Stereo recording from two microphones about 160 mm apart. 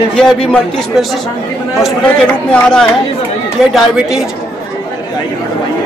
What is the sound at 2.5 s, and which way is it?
A man's voice, 5° left (ahead or behind).